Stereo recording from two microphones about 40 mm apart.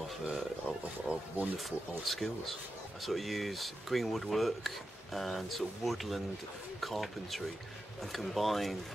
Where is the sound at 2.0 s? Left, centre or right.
Centre.